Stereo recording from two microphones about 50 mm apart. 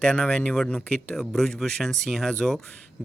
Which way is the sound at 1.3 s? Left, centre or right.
Centre.